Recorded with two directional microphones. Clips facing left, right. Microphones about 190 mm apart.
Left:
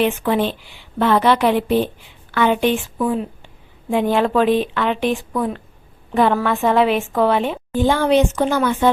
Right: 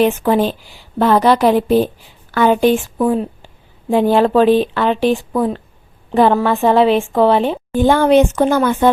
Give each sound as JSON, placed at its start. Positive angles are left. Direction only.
{"t": 0.0, "sound": "a woman's voice", "side_deg": -40}
{"t": 7.7, "sound": "speech", "side_deg": -50}